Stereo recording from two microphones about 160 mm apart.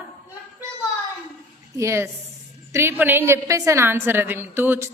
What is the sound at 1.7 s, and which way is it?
A woman's voice, 15° right (ahead or behind).